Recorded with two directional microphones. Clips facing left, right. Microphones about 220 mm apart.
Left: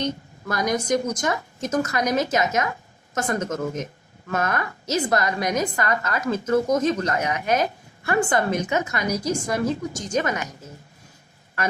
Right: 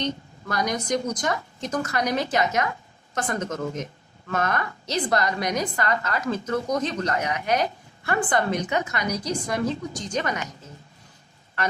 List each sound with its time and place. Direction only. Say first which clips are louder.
0.0 s a woman's voice: left 2 dB; 45° left (ahead or behind)